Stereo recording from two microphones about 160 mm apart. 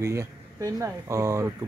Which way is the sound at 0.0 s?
20° right (ahead or behind).